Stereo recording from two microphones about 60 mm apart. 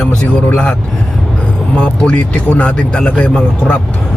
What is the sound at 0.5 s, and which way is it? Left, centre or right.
A man's voice, centre.